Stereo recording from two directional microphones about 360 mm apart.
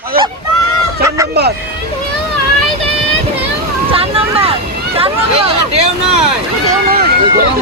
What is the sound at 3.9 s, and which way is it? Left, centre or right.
Boat, centre.